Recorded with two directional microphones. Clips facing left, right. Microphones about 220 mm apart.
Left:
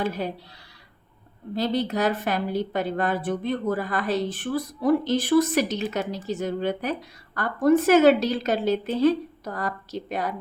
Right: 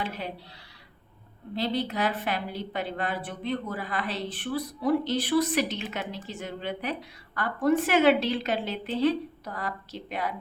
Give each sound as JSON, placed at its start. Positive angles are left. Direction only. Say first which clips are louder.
{"t": 0.0, "sound": "a woman's voice", "louder": "left 7 dB", "side_deg": 45}
{"t": 1.5, "sound": "a woman's voice", "louder": "left 4 dB", "side_deg": 45}